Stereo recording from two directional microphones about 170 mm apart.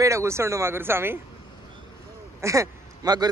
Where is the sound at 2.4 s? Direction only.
20° right (ahead or behind).